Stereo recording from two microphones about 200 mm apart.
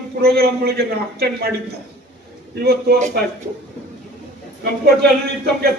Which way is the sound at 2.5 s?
50° right (ahead or behind).